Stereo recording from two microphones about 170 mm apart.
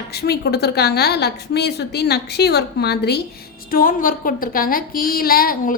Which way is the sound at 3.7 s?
55° left (ahead or behind).